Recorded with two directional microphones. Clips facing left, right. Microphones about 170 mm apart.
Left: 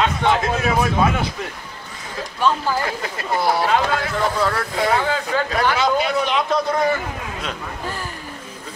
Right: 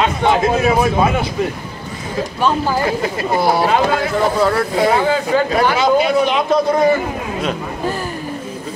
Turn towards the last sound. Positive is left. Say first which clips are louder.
# right 8 dB
turn(degrees=-20)  # may be behind; listen again after turning